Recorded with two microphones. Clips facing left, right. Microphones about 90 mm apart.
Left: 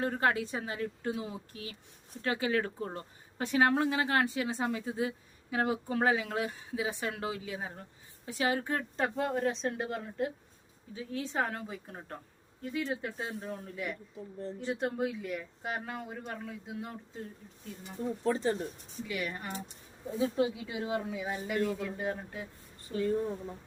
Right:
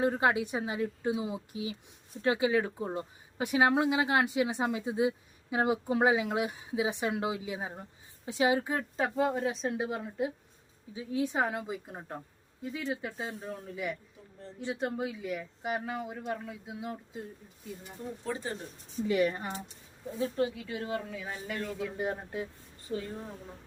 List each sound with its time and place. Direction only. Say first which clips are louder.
0.0 s speech: right 2 dB; 15° right (ahead or behind)
12.7 s speech: left 1 dB; centre (ahead or behind)
19.0 s speech: right 9 dB; 30° right (ahead or behind)
20.1 s a woman's voice: left 1 dB; 10° left (ahead or behind)
21.9 s speech: right 2 dB; 15° right (ahead or behind)